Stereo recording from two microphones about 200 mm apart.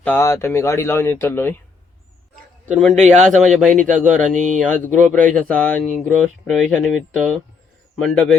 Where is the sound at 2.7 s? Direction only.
Centre (ahead or behind).